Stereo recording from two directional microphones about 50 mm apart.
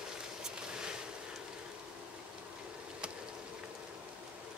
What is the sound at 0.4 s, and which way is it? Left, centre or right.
Boat, centre.